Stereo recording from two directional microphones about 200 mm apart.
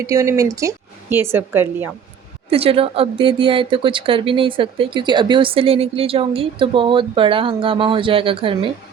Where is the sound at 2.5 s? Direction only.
30° right (ahead or behind).